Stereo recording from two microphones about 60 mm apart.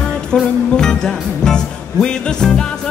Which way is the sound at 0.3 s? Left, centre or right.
Centre.